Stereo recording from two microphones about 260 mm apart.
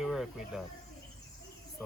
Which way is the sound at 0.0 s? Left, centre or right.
Centre.